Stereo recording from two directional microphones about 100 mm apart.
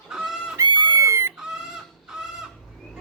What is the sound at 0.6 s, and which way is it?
Chicken, 45° right (ahead or behind).